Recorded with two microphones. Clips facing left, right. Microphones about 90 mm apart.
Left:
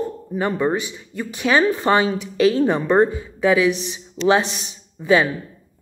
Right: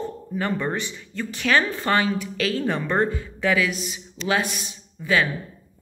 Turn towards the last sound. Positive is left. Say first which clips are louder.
# left 5 dB
turn(degrees=25)  # may be behind; listen again after turning